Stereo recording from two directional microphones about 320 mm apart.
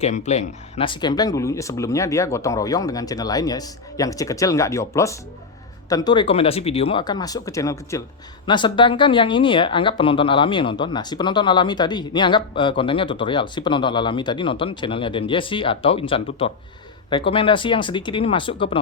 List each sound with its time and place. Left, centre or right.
0.0 s speech: left